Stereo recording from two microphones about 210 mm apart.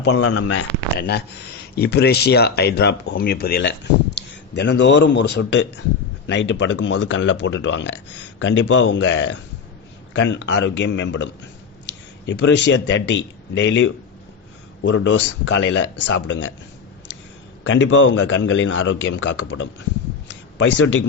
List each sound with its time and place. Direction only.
0.2 s speech: 90° left
0.9 s speech: 50° left (ahead or behind)
17.6 s speech: 60° left (ahead or behind)
20.2 s a sound: 60° left (ahead or behind)